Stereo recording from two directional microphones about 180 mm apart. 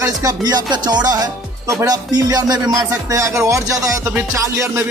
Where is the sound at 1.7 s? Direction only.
15° right (ahead or behind).